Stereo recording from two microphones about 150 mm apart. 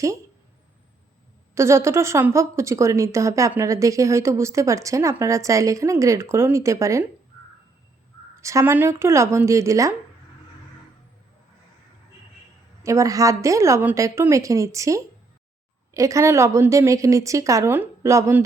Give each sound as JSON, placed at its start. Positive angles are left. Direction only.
{"t": 1.5, "sound": "a woman's voice", "side_deg": -20}
{"t": 8.4, "sound": "a woman's voice", "side_deg": -20}
{"t": 12.8, "sound": "a woman's voice", "side_deg": -20}